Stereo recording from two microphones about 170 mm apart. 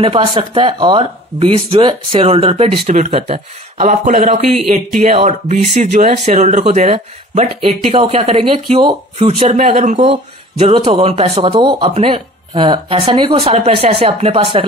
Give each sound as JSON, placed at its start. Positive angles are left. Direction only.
{"t": 0.0, "sound": "speech", "side_deg": -30}
{"t": 9.6, "sound": "speech", "side_deg": -55}
{"t": 9.9, "sound": "speech", "side_deg": -35}